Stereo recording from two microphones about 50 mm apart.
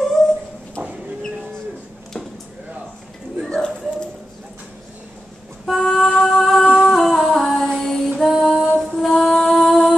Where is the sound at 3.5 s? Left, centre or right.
Centre.